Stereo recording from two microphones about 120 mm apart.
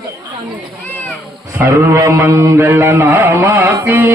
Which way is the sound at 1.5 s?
25° right (ahead or behind).